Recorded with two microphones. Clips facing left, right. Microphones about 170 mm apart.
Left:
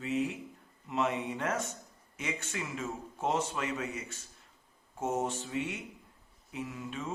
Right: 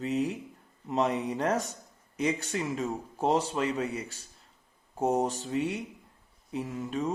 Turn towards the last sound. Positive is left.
turn(degrees=-40)  # may be behind; listen again after turning